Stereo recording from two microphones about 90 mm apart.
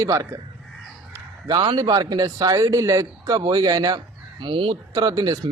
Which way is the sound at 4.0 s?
65° right (ahead or behind).